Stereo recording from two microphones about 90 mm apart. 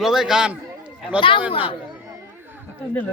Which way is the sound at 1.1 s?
65° left (ahead or behind).